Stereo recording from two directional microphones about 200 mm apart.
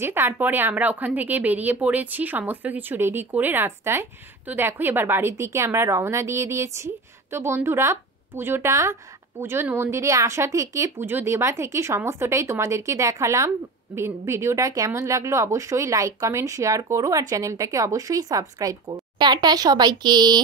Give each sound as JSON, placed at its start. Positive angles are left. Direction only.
{"t": 0.0, "sound": "speech", "side_deg": -10}